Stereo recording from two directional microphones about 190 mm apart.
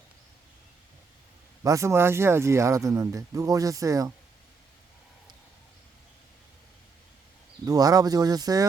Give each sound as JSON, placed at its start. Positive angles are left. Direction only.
{"t": 1.6, "sound": "speech", "side_deg": -15}
{"t": 7.6, "sound": "speech", "side_deg": -20}